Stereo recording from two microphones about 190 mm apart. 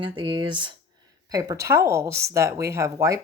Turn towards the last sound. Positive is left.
turn(degrees=-15)  # may be behind; listen again after turning